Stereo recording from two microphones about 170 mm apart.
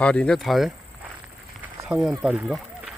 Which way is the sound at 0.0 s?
5° left (ahead or behind).